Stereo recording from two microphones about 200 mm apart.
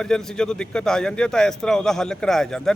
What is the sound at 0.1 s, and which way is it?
A man's voice, 5° left (ahead or behind).